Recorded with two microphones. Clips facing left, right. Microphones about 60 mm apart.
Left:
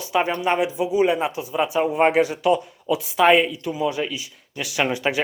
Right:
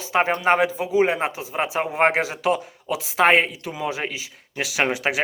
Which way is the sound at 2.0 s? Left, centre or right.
Right.